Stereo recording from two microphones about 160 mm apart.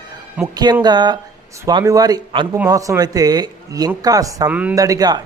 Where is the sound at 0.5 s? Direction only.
25° right (ahead or behind).